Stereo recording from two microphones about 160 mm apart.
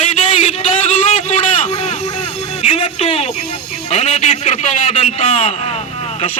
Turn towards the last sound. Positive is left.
turn(degrees=40)  # may be behind; listen again after turning